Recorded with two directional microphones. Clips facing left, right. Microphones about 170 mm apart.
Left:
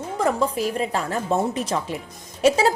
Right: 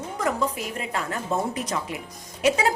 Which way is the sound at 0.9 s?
30° left (ahead or behind).